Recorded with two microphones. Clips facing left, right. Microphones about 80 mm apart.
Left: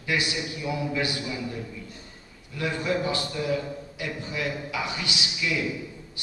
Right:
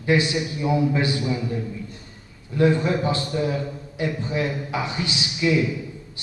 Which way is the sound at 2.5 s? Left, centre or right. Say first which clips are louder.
Right 8 dB; right.